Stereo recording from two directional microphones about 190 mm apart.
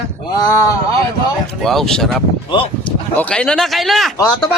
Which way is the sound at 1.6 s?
Centre (ahead or behind).